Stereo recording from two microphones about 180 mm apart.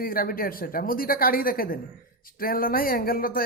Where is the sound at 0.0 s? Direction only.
55° left (ahead or behind).